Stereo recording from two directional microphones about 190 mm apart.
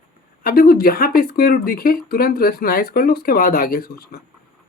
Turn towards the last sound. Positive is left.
turn(degrees=50)  # may be behind; listen again after turning